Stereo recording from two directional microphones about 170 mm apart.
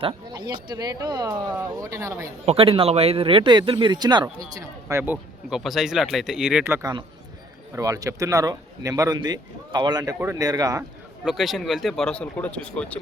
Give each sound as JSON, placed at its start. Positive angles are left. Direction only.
{"t": 0.0, "sound": "speech", "side_deg": -25}
{"t": 2.5, "sound": "speech", "side_deg": -35}
{"t": 5.5, "sound": "speech", "side_deg": 0}
{"t": 6.7, "sound": "speech", "side_deg": -15}
{"t": 11.3, "sound": "speech", "side_deg": 0}